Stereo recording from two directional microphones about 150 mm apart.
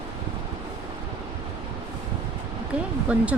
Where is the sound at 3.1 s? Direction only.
10° right (ahead or behind).